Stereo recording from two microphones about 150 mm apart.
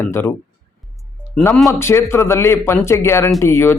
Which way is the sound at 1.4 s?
20° left (ahead or behind).